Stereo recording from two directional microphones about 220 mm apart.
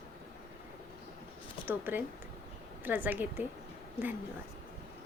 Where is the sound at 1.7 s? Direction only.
10° right (ahead or behind).